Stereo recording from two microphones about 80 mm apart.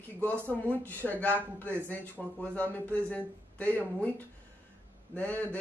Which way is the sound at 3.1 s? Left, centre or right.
Centre.